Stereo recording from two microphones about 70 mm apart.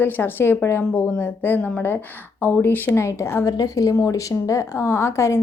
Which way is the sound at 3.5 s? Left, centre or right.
Left.